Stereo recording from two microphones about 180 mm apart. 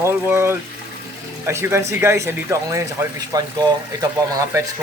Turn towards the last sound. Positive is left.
turn(degrees=-20)  # may be behind; listen again after turning